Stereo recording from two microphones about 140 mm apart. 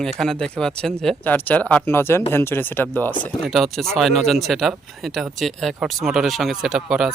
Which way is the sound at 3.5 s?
Centre (ahead or behind).